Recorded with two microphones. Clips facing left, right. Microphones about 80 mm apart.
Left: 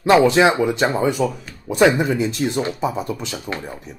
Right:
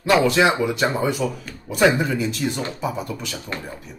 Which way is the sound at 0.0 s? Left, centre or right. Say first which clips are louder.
Left 4 dB; left.